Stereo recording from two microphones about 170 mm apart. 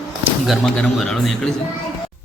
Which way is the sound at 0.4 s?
Centre (ahead or behind).